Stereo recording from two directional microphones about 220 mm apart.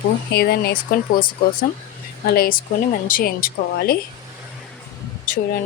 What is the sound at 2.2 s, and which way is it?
A woman's voice, 45° left (ahead or behind).